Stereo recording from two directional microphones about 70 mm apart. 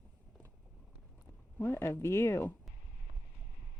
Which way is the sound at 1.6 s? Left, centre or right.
Left.